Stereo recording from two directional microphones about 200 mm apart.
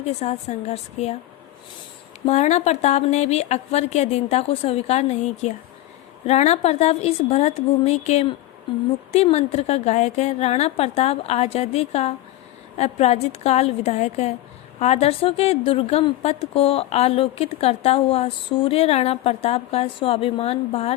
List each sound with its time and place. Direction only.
0.0 s speech: 30° left (ahead or behind)
2.2 s a woman's voice: 35° left (ahead or behind)